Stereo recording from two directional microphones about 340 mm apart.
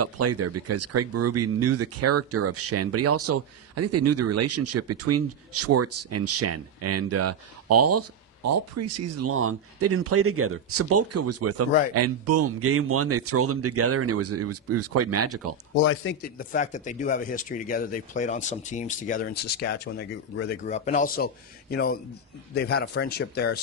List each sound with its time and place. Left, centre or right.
0.0 s speech: right
15.7 s speech: left